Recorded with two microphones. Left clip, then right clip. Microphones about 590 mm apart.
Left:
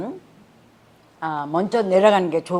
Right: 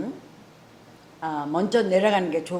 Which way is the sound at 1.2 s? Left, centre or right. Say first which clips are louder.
Left 3 dB; left.